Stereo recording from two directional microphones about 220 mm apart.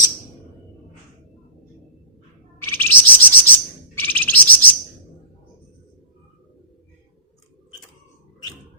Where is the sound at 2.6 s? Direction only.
10° left (ahead or behind).